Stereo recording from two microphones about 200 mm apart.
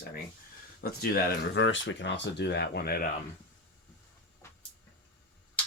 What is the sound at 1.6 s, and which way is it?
Speech, 70° left (ahead or behind).